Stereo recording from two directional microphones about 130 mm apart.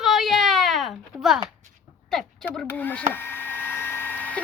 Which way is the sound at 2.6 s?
15° left (ahead or behind).